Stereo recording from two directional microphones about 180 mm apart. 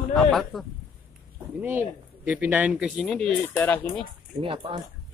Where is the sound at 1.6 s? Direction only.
10° right (ahead or behind); by 4.0 s 10° left (ahead or behind).